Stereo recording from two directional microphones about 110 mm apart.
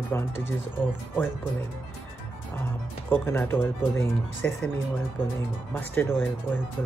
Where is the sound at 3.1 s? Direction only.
20° left (ahead or behind).